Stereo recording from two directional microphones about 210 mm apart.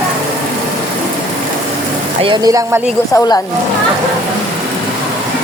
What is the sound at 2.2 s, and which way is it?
Speech, 15° right (ahead or behind).